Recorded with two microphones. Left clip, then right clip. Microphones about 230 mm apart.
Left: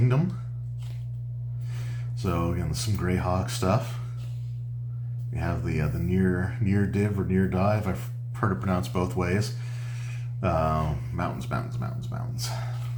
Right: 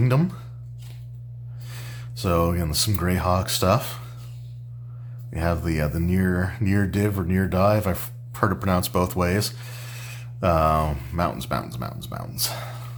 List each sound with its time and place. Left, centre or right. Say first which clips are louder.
2.1 s speech: right 7 dB; right
5.3 s speech: right 7 dB; right